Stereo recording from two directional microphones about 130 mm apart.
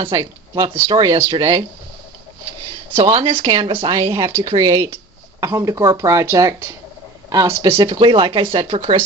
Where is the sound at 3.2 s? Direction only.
45° right (ahead or behind).